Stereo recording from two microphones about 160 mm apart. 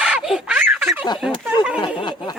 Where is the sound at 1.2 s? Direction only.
5° right (ahead or behind).